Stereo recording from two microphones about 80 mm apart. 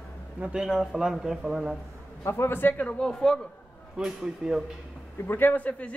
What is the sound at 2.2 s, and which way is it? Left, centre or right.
Speech, left.